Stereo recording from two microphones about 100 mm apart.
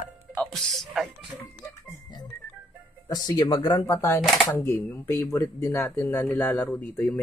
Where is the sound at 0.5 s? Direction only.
5° left (ahead or behind).